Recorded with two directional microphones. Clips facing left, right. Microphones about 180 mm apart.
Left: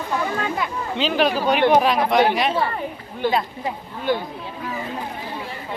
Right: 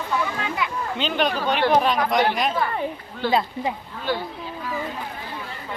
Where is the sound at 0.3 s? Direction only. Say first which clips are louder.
Left 3 dB; 45° left (ahead or behind).